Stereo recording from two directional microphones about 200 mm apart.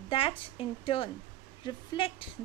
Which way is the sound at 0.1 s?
25° left (ahead or behind).